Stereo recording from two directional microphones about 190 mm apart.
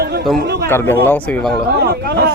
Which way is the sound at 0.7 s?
10° left (ahead or behind).